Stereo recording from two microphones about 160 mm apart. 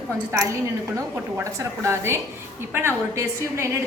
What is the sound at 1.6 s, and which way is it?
A woman's voice, 15° right (ahead or behind).